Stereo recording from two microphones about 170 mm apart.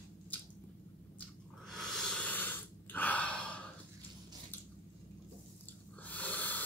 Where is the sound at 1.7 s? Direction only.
Centre (ahead or behind).